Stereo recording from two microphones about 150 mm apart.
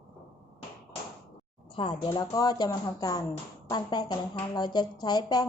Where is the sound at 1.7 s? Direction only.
35° left (ahead or behind).